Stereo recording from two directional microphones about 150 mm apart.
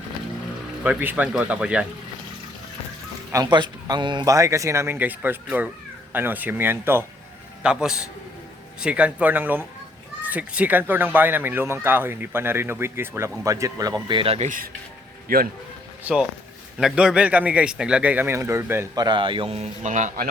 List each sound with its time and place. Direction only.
0.9 s speech: 10° right (ahead or behind)
3.3 s a man's voice: 30° right (ahead or behind); by 14.7 s 60° right (ahead or behind)
15.3 s speech: 85° right
16.1 s speech: 10° right (ahead or behind)
18.9 s a man's voice: 30° right (ahead or behind); by 20.3 s 65° right (ahead or behind)